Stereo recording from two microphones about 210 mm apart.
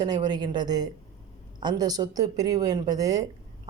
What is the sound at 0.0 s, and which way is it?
Speech, 20° right (ahead or behind).